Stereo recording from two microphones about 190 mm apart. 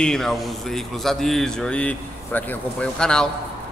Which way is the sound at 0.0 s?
5° left (ahead or behind).